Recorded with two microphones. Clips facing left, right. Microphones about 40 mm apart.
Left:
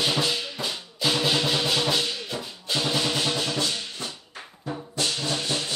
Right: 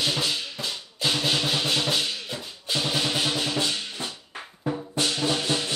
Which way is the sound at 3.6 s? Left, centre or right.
Right.